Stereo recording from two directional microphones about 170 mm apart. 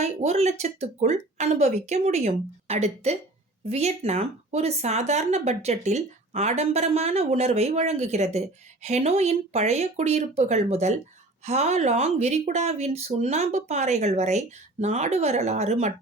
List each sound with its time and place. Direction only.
0.0 s speech: 40° right (ahead or behind)